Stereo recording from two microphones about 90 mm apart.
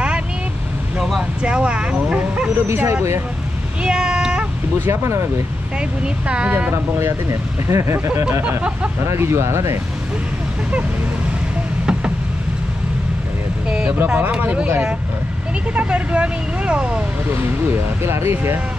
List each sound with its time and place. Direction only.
0.9 s speech: 5° right (ahead or behind)
2.7 s speech: 30° right (ahead or behind)
3.8 s meow: 10° right (ahead or behind)
4.8 s speech: 30° right (ahead or behind)
5.8 s speech: 15° right (ahead or behind)
6.7 s speech: 30° right (ahead or behind)
8.3 s speech: 15° right (ahead or behind)
9.0 s speech: 30° right (ahead or behind)
13.7 s speech: 10° right (ahead or behind)
15.7 s speech: 15° right (ahead or behind)
18.0 s speech: 30° right (ahead or behind)